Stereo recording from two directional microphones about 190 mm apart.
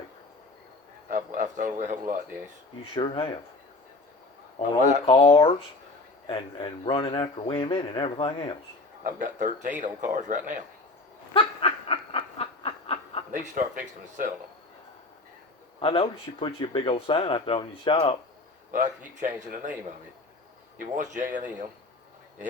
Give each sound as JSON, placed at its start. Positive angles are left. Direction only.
{"t": 1.0, "sound": "speech", "side_deg": -45}
{"t": 2.9, "sound": "speech", "side_deg": 25}
{"t": 4.8, "sound": "speech", "side_deg": 30}
{"t": 9.0, "sound": "a man's voice", "side_deg": -40}
{"t": 11.3, "sound": "snicker", "side_deg": 30}
{"t": 13.3, "sound": "speech", "side_deg": -40}
{"t": 15.8, "sound": "speech", "side_deg": 25}
{"t": 18.7, "sound": "speech", "side_deg": -45}
{"t": 20.7, "sound": "a man's voice", "side_deg": -40}